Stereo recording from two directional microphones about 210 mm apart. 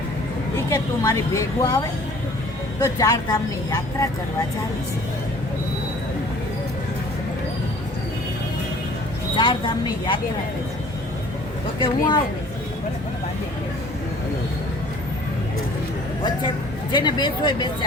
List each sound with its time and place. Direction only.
0.5 s speech: 15° left (ahead or behind)
2.8 s speech: 15° left (ahead or behind)
9.3 s speech: 20° left (ahead or behind)
11.8 s speech: 20° left (ahead or behind)
16.9 s speech: 20° left (ahead or behind)